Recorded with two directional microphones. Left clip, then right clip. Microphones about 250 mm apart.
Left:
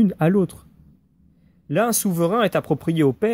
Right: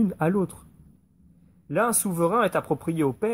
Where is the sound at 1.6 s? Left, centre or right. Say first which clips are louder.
Left 3 dB; left.